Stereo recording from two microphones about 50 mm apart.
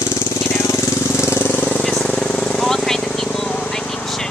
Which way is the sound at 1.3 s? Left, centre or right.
Left.